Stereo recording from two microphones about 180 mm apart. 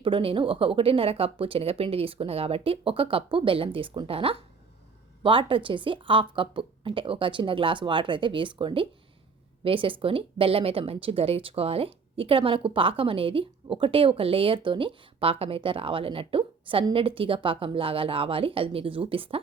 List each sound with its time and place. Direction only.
0.0 s a woman's voice: 30° right (ahead or behind)